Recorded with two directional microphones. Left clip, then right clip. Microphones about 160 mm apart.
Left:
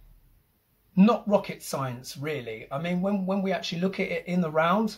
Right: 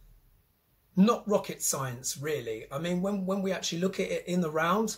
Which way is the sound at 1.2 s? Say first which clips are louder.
Left 3 dB; 15° right (ahead or behind).